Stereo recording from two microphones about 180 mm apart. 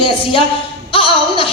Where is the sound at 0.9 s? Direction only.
30° left (ahead or behind).